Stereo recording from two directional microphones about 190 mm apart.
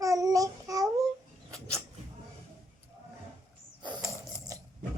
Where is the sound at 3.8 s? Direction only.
20° right (ahead or behind).